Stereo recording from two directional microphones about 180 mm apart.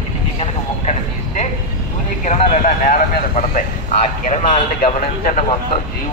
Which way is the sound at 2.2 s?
40° left (ahead or behind).